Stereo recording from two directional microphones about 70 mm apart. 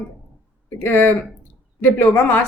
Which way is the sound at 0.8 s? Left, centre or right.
Left.